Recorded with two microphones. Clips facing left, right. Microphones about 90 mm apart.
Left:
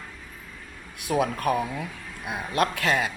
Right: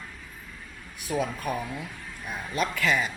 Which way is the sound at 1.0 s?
60° left (ahead or behind).